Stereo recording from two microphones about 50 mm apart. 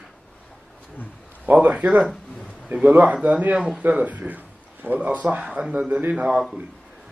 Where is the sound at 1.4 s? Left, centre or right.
Right.